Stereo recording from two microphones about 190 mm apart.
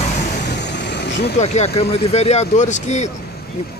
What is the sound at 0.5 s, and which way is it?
Vehicle, 60° left (ahead or behind).